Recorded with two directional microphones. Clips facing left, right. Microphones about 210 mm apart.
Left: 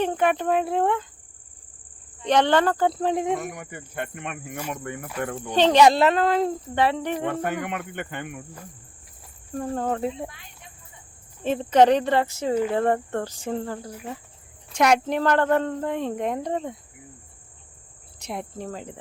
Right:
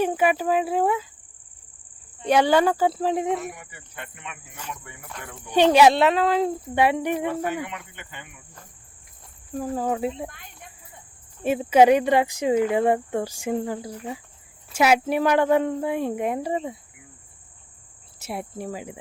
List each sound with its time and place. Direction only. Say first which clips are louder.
0.0 s speech: right 1 dB; 5° right (ahead or behind)
2.2 s speech: right 1 dB; 10° right (ahead or behind)
3.5 s speech: left 7 dB; 50° left (ahead or behind)
5.5 s speech: right 1 dB; 10° right (ahead or behind)
7.3 s speech: even; 55° left (ahead or behind)
9.6 s speech: right 1 dB; 5° right (ahead or behind)
11.4 s speech: right 1 dB; 10° right (ahead or behind)
18.2 s speech: right 1 dB; 5° right (ahead or behind)